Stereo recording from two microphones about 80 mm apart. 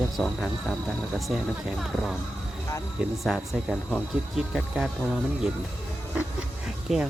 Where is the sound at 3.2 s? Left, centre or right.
Centre.